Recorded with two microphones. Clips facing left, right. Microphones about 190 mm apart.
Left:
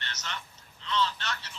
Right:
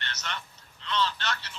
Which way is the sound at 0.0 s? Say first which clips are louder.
Right 2 dB; 60° right (ahead or behind).